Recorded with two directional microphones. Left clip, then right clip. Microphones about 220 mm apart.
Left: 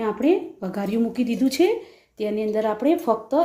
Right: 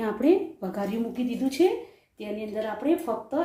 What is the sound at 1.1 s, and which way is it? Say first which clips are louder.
Speech: left 6 dB; 45° left (ahead or behind).